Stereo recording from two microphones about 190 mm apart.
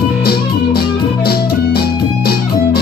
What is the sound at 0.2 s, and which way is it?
Music, 55° left (ahead or behind).